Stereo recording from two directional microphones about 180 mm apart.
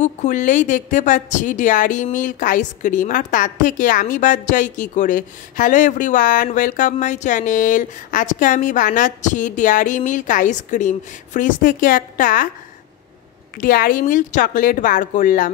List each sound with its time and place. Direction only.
0.0 s a woman's voice: 45° left (ahead or behind)
13.6 s a woman's voice: 50° left (ahead or behind)